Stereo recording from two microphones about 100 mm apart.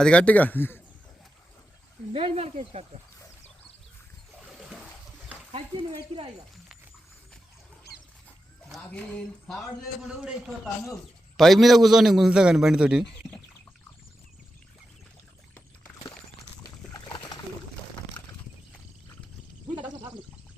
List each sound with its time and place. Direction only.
0.0 s speech: 10° left (ahead or behind)
2.1 s speech: 80° right
4.4 s a sound: centre (ahead or behind)
5.5 s speech: 75° right (ahead or behind); by 6.3 s 60° right (ahead or behind)
8.9 s speech: 10° left (ahead or behind)
10.1 s a man's voice: 5° right (ahead or behind)
16.9 s pigeon: 45° left (ahead or behind)